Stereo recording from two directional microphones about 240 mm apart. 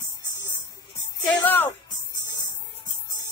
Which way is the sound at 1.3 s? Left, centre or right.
Centre.